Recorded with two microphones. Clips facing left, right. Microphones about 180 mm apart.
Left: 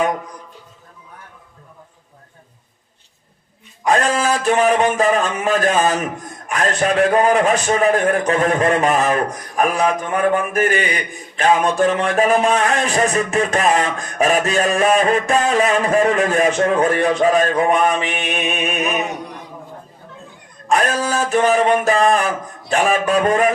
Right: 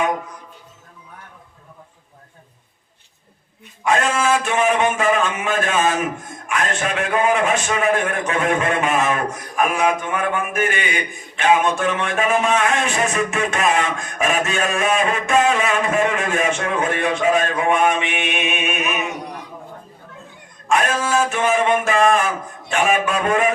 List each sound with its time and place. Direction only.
3.8 s speech: 35° left (ahead or behind)
20.7 s speech: 35° left (ahead or behind)